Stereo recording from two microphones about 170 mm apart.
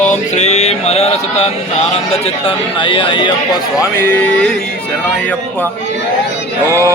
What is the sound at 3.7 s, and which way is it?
Speech, 10° left (ahead or behind).